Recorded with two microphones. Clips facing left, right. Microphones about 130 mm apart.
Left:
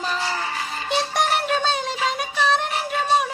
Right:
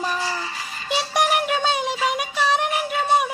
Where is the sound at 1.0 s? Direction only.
15° right (ahead or behind).